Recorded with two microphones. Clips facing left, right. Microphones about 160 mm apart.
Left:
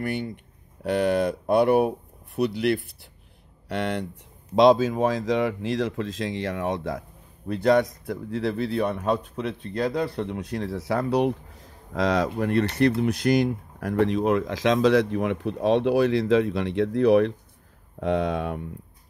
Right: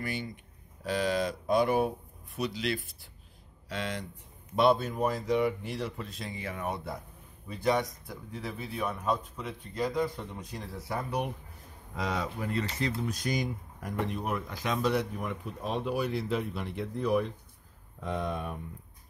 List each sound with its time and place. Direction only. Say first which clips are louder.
0.0 s speech: left 7 dB; 60° left (ahead or behind)
4.6 s speech: left 8 dB; 90° left